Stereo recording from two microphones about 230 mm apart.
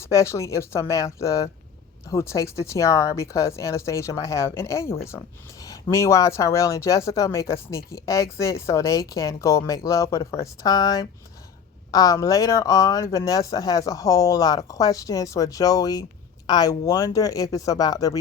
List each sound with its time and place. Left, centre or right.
0.0 s speech: centre